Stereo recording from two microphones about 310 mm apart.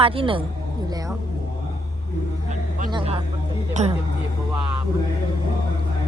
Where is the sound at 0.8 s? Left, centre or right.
Centre.